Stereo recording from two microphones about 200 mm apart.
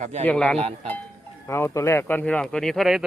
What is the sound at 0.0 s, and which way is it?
Speech, 35° right (ahead or behind).